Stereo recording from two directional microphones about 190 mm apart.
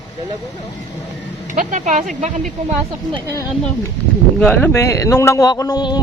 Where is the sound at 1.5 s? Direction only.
40° right (ahead or behind).